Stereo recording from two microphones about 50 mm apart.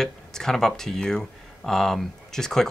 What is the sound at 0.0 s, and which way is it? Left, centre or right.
Speech, centre.